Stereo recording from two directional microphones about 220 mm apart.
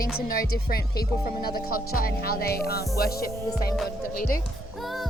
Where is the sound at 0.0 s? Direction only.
40° left (ahead or behind).